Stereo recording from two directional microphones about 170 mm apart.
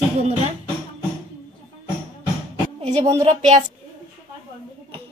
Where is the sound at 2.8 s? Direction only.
40° right (ahead or behind).